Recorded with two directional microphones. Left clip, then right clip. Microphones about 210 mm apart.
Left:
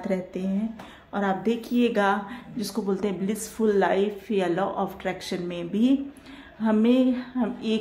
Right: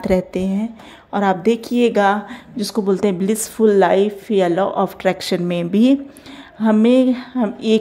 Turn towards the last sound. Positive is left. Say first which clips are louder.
# right 10 dB
turn(degrees=-35)  # may be behind; listen again after turning